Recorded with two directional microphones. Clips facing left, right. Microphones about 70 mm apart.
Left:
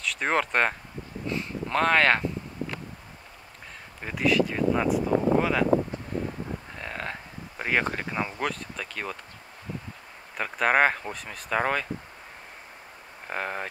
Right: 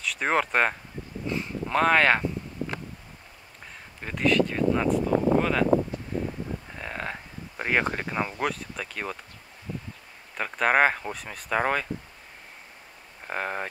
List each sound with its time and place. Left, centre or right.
0.0 s speech: centre
4.0 s speech: centre
6.8 s speech: centre
10.3 s speech: centre
13.3 s speech: centre